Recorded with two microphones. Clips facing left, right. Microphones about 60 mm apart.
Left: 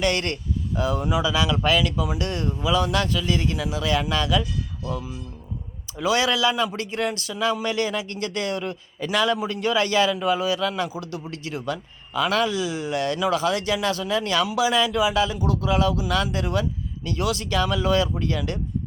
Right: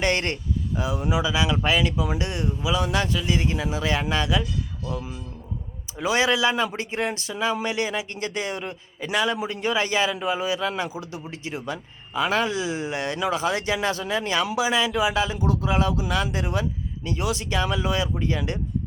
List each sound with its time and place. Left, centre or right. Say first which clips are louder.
0.0 s speech: even; right
0.8 s speech: left 2 dB; centre
6.0 s speech: even; right